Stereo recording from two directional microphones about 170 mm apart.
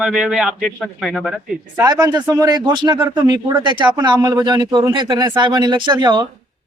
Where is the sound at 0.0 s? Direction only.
5° right (ahead or behind).